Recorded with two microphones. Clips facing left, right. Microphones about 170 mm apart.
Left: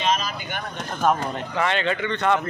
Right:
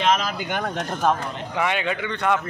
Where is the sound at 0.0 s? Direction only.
90° right.